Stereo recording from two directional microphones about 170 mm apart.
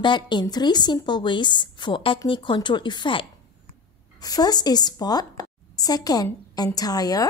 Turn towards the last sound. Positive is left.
turn(degrees=20)  # may be behind; listen again after turning